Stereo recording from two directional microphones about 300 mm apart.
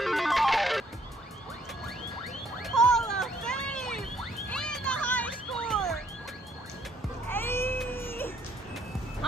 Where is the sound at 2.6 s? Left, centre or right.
Centre.